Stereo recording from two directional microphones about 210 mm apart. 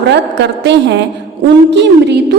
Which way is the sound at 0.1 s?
55° right (ahead or behind).